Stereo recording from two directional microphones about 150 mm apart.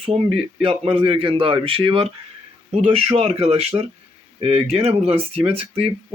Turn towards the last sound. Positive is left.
turn(degrees=-40)  # may be behind; listen again after turning